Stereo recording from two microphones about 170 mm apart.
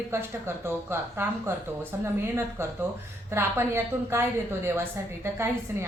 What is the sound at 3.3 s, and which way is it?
Speech, 15° right (ahead or behind).